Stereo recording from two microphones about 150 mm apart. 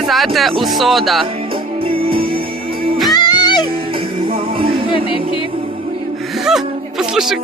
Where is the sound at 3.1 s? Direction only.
30° left (ahead or behind).